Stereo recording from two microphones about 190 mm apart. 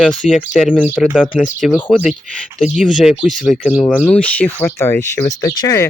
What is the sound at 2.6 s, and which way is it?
Speech, 5° right (ahead or behind).